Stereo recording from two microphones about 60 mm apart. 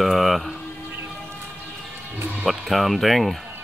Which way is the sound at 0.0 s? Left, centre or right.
Centre.